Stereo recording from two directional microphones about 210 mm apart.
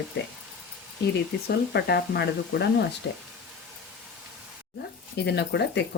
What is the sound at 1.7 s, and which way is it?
A woman's voice, 50° left (ahead or behind).